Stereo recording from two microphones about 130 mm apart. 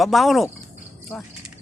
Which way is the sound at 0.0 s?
Centre (ahead or behind).